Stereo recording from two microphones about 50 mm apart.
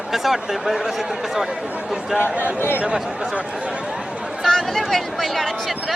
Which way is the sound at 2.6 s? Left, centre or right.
Left.